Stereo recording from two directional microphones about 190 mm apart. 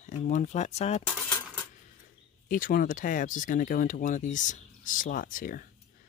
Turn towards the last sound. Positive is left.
turn(degrees=45)  # may be behind; listen again after turning